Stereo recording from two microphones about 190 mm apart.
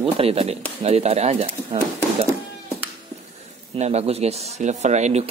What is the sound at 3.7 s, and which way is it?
Speech, 35° right (ahead or behind).